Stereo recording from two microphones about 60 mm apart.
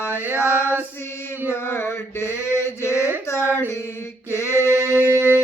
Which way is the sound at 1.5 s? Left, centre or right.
Left.